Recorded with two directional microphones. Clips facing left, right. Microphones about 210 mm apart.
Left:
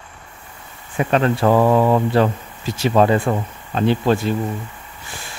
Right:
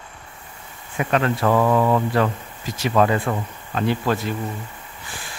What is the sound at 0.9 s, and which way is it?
Speech, 30° left (ahead or behind).